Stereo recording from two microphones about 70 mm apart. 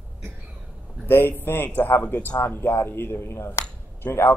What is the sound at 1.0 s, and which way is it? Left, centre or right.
Speech, left.